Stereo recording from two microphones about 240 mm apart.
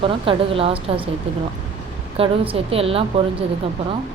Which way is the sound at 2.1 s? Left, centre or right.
Right.